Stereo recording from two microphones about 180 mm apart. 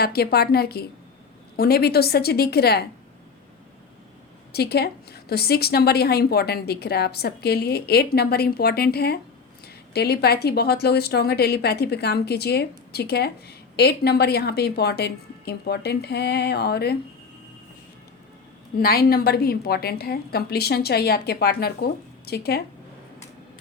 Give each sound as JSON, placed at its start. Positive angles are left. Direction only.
{"t": 0.0, "sound": "a woman's voice", "side_deg": 60}
{"t": 4.5, "sound": "a woman's voice", "side_deg": 65}
{"t": 18.8, "sound": "a woman's voice", "side_deg": 55}